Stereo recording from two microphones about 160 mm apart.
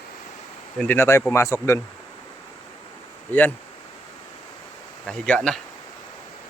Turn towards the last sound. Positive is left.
turn(degrees=5)  # may be behind; listen again after turning